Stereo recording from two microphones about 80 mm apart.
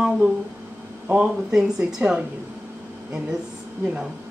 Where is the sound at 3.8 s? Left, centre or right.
Centre.